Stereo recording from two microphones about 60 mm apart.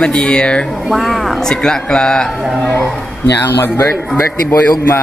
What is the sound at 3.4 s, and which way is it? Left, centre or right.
A man's voice, left.